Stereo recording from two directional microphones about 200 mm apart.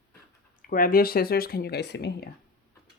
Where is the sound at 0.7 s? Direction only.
45° left (ahead or behind).